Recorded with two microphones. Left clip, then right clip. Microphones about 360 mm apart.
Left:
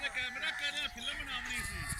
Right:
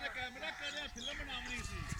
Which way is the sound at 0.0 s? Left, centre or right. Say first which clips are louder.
Left 6 dB; right.